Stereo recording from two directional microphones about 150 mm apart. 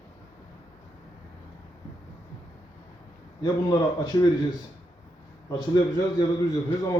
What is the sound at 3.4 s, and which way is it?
Speech, 25° left (ahead or behind).